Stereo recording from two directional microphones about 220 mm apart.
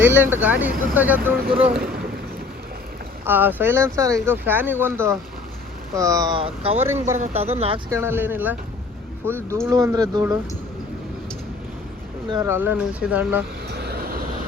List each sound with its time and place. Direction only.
0.0 s speech: 10° right (ahead or behind)
1.8 s speech: 45° right (ahead or behind)
3.2 s speech: 10° right (ahead or behind); by 6.7 s 25° right (ahead or behind)
6.7 s speech: 10° right (ahead or behind)
7.2 s speech: 30° right (ahead or behind)
7.9 s speech: 10° right (ahead or behind)
12.3 s speech: 10° right (ahead or behind)
13.7 s vehicle: 45° right (ahead or behind)